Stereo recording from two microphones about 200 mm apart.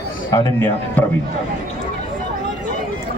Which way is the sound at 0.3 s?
15° left (ahead or behind).